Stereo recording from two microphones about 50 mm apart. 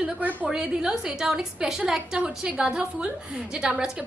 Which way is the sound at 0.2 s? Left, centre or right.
Right.